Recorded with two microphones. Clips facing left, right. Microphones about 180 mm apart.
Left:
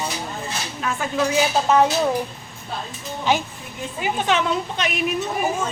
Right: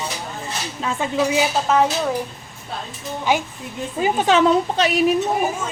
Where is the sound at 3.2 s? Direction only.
15° right (ahead or behind).